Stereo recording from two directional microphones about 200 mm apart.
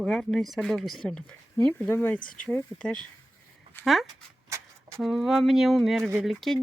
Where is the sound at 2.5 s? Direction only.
5° left (ahead or behind).